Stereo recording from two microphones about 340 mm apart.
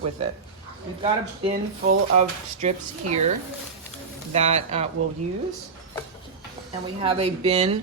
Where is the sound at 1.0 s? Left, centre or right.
Right.